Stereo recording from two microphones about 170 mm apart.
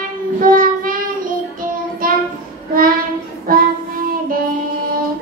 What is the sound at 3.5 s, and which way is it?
Music, 55° right (ahead or behind).